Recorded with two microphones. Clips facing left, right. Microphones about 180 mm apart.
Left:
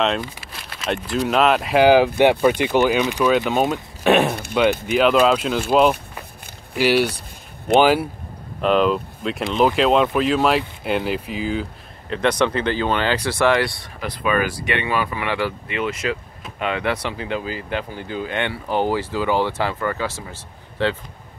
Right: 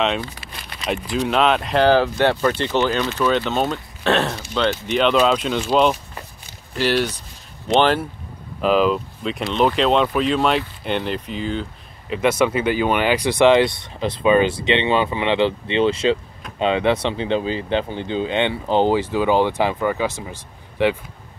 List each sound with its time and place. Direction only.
0.4 s speech: centre (ahead or behind)
12.1 s speech: 5° right (ahead or behind)